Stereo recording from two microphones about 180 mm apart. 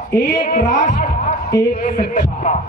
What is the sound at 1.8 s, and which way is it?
Speech, 45° left (ahead or behind).